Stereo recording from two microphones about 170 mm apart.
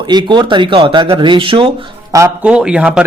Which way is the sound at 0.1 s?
25° right (ahead or behind).